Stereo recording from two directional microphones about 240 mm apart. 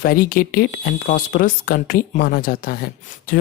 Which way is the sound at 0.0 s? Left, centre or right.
Left.